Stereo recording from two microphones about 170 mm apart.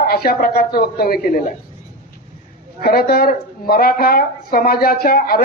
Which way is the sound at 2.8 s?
65° left (ahead or behind).